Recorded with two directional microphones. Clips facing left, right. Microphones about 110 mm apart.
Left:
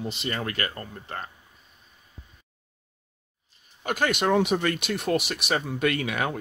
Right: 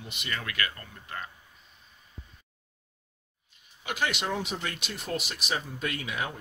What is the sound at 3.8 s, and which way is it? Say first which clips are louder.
Speech: left 6 dB; 50° left (ahead or behind).